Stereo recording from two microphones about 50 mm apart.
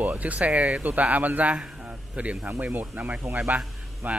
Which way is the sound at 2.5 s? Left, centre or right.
Right.